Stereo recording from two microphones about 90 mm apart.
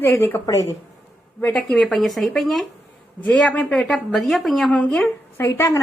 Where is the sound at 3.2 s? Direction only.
10° left (ahead or behind).